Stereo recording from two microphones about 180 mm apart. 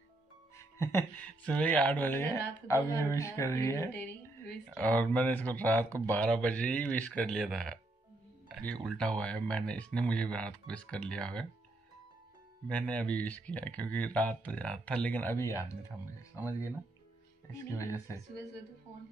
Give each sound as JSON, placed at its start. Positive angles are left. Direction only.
{"t": 0.6, "sound": "speech", "side_deg": 15}
{"t": 8.8, "sound": "speech", "side_deg": 5}
{"t": 12.6, "sound": "speech", "side_deg": 5}
{"t": 16.3, "sound": "speech", "side_deg": -10}
{"t": 17.5, "sound": "speech", "side_deg": 15}
{"t": 18.9, "sound": "speech", "side_deg": -10}